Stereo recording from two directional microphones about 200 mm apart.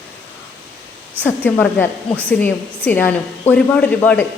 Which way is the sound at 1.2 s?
10° left (ahead or behind).